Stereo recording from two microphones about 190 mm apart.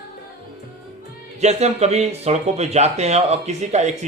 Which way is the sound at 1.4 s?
35° right (ahead or behind).